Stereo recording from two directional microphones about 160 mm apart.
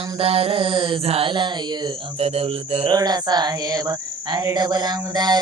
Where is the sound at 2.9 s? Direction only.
25° right (ahead or behind).